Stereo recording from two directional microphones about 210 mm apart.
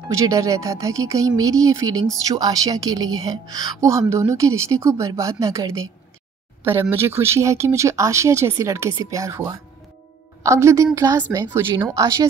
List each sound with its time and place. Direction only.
0.1 s speech: 15° right (ahead or behind)